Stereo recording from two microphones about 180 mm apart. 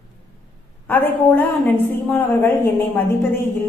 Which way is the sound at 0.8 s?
10° left (ahead or behind).